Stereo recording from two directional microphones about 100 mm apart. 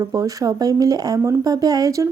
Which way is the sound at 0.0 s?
35° right (ahead or behind).